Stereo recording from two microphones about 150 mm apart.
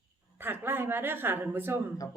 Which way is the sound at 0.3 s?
15° right (ahead or behind).